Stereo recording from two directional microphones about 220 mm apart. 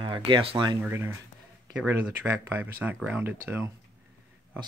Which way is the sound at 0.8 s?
10° right (ahead or behind).